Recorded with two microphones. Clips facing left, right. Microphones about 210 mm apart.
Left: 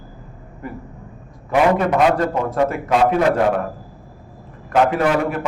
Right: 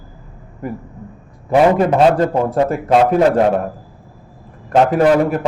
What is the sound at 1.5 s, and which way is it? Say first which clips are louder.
A man's voice: right 4 dB; 30° right (ahead or behind).